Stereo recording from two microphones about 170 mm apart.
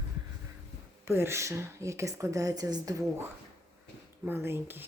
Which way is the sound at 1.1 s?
15° right (ahead or behind).